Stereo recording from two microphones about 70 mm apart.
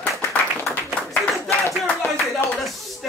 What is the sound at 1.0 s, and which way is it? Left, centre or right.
Clapping, centre.